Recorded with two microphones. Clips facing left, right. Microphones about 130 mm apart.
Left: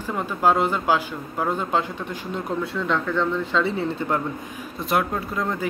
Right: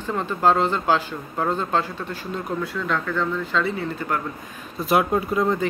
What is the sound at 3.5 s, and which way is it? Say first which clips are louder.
Speech: left 1 dB; 30° left (ahead or behind).